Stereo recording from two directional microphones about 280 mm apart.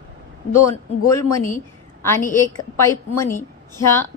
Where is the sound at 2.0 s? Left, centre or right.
Centre.